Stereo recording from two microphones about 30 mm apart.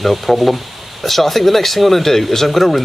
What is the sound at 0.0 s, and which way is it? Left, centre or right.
Speech, centre.